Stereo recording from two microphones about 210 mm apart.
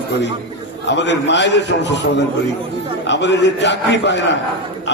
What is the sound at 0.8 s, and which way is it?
A man's voice, 55° left (ahead or behind).